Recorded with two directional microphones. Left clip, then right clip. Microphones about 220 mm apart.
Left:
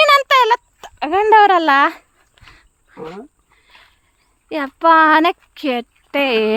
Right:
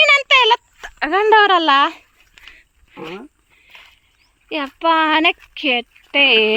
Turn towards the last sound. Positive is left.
turn(degrees=30)  # may be behind; listen again after turning